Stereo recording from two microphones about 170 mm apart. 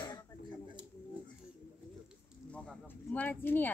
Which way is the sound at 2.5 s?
5° left (ahead or behind).